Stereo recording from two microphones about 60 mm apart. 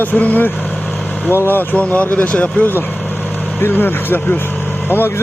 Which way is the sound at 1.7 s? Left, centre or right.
Left.